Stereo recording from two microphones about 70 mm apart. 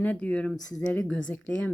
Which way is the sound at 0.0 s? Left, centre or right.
Left.